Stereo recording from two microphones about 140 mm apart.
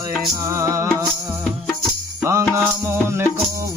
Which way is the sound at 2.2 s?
20° right (ahead or behind).